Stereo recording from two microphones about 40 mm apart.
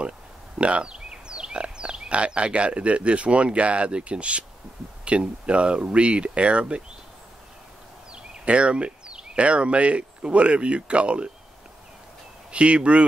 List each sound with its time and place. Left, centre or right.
0.6 s speech: right
8.1 s speech: right
12.4 s speech: right